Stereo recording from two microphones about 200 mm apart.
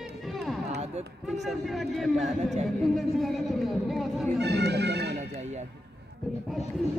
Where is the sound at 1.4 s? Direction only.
Centre (ahead or behind).